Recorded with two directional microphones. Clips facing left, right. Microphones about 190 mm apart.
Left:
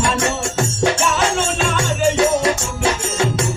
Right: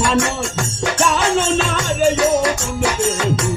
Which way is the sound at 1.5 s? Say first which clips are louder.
Right 1 dB; 25° left (ahead or behind).